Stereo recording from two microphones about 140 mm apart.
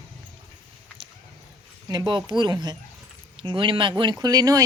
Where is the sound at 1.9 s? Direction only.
30° right (ahead or behind).